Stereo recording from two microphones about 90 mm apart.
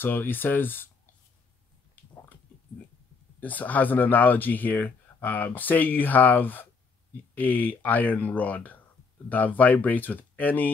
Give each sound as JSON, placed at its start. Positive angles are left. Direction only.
{"t": 0.0, "sound": "speech", "side_deg": 20}
{"t": 3.3, "sound": "speech", "side_deg": 20}